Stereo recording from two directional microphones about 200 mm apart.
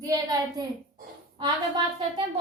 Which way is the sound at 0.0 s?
20° right (ahead or behind).